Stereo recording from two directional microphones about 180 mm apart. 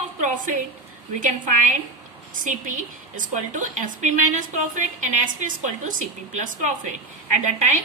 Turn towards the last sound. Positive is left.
turn(degrees=-45)  # may be behind; listen again after turning